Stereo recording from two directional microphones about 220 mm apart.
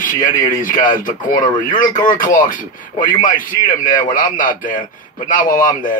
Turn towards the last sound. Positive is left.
turn(degrees=40)  # may be behind; listen again after turning